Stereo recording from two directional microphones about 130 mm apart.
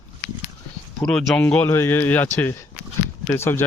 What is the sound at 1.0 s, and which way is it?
Speech, 5° left (ahead or behind).